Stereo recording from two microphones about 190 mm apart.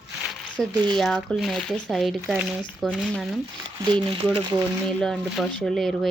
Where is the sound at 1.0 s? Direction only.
Centre (ahead or behind).